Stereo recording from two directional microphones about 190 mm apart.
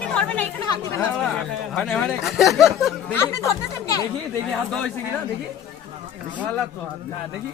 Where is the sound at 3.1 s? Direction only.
15° left (ahead or behind).